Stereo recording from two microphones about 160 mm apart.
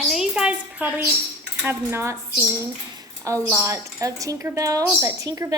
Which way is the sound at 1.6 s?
15° right (ahead or behind).